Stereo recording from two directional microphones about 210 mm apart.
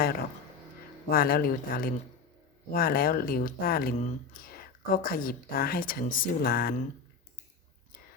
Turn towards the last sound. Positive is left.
turn(degrees=45)  # may be behind; listen again after turning